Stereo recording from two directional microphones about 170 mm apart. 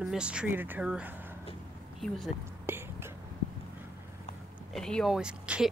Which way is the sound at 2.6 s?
15° right (ahead or behind).